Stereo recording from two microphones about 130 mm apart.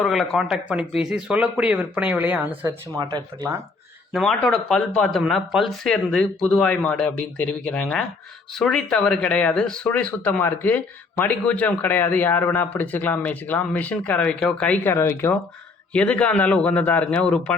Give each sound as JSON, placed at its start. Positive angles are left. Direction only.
{"t": 0.0, "sound": "speech", "side_deg": 0}
{"t": 3.0, "sound": "speech", "side_deg": -35}
{"t": 4.1, "sound": "speech", "side_deg": 5}